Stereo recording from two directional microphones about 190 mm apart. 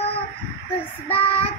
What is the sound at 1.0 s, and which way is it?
Child singing, 30° left (ahead or behind).